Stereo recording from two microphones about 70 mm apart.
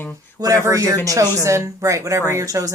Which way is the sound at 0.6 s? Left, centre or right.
Right.